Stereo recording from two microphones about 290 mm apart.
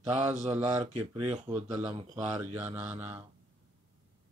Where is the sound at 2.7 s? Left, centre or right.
Centre.